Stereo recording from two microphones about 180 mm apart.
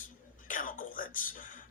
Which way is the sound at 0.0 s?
50° left (ahead or behind).